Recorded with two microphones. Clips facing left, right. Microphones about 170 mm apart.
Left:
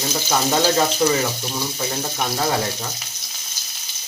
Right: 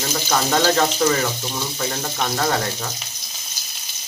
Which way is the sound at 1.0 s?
15° left (ahead or behind).